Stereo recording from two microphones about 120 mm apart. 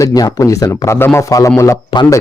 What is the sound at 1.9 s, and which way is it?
Speech, 40° left (ahead or behind).